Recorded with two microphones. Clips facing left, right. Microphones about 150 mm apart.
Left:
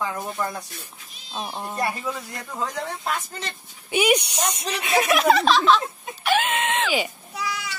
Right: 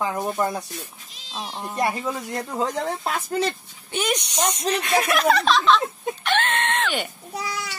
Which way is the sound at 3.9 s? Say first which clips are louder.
Left 4 dB; 10° left (ahead or behind).